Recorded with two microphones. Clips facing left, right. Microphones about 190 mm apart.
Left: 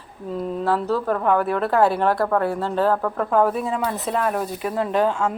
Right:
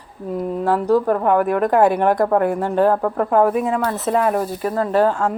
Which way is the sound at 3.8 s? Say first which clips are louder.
Right 4 dB; 5° right (ahead or behind).